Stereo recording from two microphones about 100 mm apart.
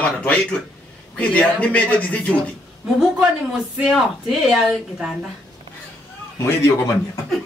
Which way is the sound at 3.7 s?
5° right (ahead or behind).